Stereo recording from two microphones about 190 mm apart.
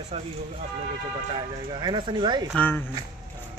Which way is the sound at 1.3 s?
25° right (ahead or behind).